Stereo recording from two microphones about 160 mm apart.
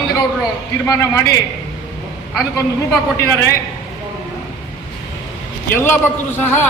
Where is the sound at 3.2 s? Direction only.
15° left (ahead or behind).